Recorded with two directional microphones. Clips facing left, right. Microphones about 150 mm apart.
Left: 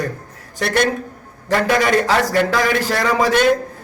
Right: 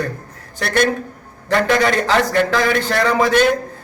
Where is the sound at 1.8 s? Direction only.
10° left (ahead or behind).